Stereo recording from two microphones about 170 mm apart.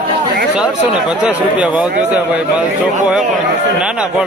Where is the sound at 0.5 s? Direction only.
5° right (ahead or behind).